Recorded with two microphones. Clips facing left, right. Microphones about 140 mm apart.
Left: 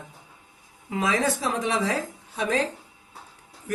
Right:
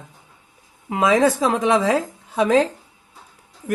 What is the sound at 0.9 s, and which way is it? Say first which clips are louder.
Speech: right 8 dB; 90° right.